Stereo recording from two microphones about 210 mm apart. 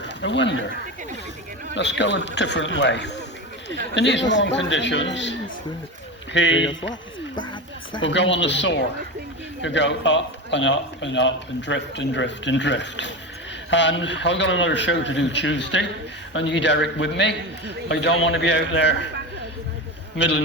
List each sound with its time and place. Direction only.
0.0 s speech: 60° left (ahead or behind)
1.7 s a man's voice: 60° left (ahead or behind)
8.0 s a man's voice: 60° left (ahead or behind)
20.1 s a man's voice: 60° left (ahead or behind)